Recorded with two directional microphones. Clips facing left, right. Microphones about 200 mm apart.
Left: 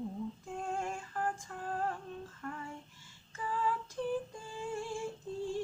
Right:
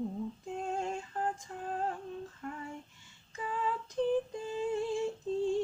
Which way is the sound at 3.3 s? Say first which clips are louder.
Even; 20° right (ahead or behind).